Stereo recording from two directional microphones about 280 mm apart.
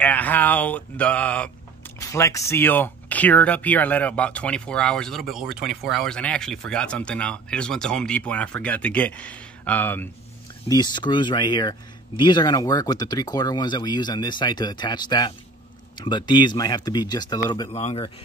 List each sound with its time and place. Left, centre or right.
0.0 s speech: centre; by 18.1 s left